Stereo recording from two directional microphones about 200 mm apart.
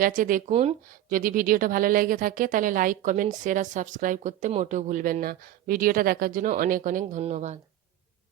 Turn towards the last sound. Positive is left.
turn(degrees=-35)  # may be behind; listen again after turning